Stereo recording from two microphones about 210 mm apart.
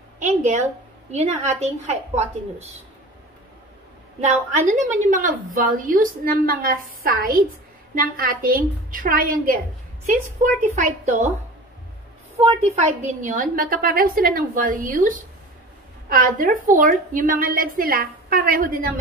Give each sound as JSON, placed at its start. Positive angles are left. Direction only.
{"t": 0.2, "sound": "a woman's voice", "side_deg": -35}
{"t": 4.2, "sound": "a woman's voice", "side_deg": -35}
{"t": 12.4, "sound": "a woman's voice", "side_deg": -35}